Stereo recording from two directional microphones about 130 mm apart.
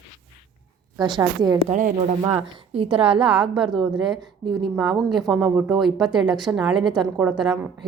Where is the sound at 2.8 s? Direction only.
10° right (ahead or behind).